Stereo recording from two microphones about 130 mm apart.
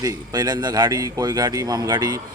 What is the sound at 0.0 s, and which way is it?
A man's voice, 35° right (ahead or behind).